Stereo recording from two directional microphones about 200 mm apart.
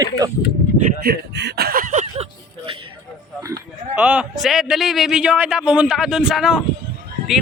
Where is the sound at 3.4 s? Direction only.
15° right (ahead or behind).